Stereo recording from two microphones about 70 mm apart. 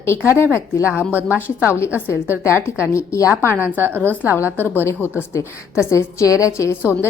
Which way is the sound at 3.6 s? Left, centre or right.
Right.